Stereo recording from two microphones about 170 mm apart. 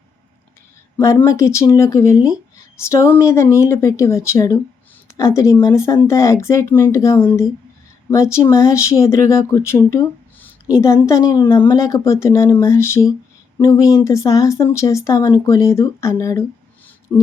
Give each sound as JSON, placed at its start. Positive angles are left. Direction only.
{"t": 0.9, "sound": "speech", "side_deg": 15}
{"t": 2.1, "sound": "speech", "side_deg": -5}
{"t": 2.8, "sound": "speech", "side_deg": 15}